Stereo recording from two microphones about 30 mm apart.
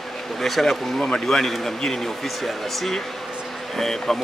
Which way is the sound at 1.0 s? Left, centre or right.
Left.